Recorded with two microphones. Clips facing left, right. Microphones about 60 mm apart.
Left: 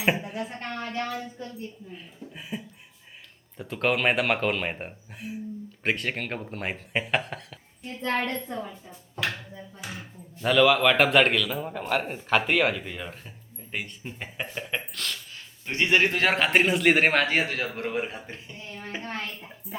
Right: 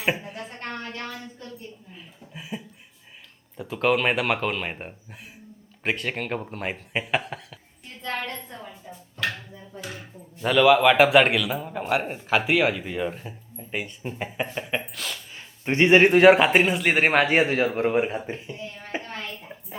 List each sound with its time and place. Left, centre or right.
0.0 s a sound: centre
1.9 s speech: centre
3.6 s speech: centre
10.4 s speech: centre
15.6 s speech: right
16.5 s speech: centre
17.2 s speech: right